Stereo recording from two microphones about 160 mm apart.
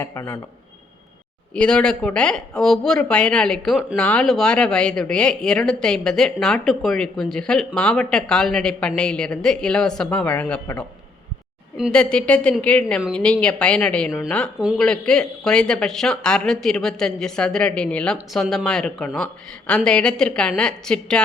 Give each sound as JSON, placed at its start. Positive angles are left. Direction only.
{"t": 0.0, "sound": "a woman's voice", "side_deg": 15}
{"t": 1.5, "sound": "a woman's voice", "side_deg": 5}